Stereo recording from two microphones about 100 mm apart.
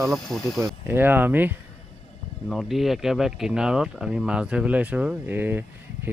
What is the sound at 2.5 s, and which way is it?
Speech, centre (ahead or behind).